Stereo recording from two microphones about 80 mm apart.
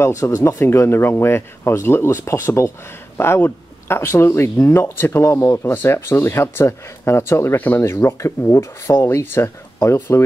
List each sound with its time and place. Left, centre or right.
0.0 s speech: left
0.7 s speech: left
5.5 s speech: left